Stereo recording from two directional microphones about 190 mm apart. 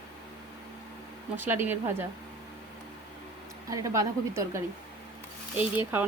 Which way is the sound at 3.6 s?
15° right (ahead or behind).